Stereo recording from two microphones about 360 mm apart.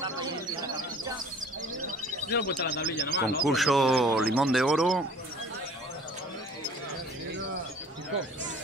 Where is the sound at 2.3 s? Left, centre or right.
Left.